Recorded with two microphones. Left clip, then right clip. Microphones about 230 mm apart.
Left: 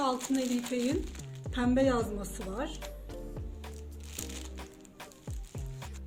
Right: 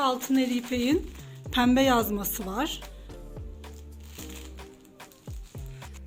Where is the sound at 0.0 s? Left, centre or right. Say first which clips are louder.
Right 5 dB; right.